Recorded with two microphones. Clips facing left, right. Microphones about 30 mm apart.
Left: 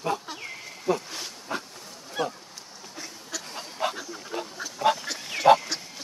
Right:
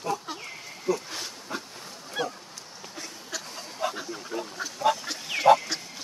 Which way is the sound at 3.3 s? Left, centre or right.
Centre.